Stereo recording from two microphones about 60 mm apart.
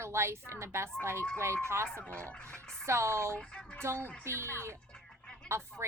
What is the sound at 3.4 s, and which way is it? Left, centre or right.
Speech, centre.